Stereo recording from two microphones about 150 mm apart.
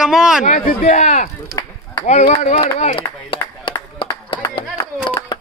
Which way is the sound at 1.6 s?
20° left (ahead or behind).